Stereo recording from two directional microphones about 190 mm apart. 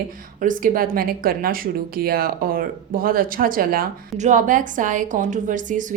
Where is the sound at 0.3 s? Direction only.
45° right (ahead or behind).